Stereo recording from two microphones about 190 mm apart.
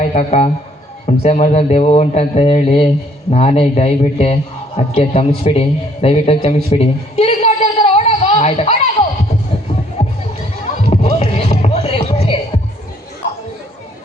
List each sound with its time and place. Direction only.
0.0 s a man's voice: 40° left (ahead or behind)
6.7 s a sound: 30° left (ahead or behind)
10.8 s music: 30° left (ahead or behind)